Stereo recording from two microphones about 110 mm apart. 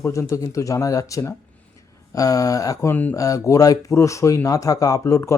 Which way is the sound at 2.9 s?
15° left (ahead or behind).